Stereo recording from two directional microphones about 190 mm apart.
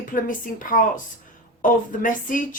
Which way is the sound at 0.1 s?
45° left (ahead or behind).